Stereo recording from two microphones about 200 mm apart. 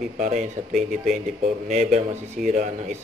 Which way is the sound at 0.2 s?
40° right (ahead or behind).